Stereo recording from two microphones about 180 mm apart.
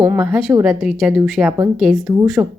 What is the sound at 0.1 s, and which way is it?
A woman's voice, 5° right (ahead or behind).